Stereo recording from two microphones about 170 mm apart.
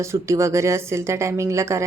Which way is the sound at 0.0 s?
15° right (ahead or behind).